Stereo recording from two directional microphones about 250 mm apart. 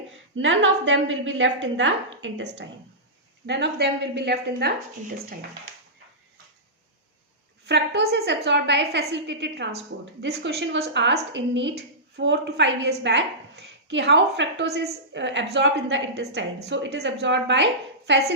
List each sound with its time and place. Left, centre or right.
0.3 s a woman's voice: right
7.7 s a woman's voice: right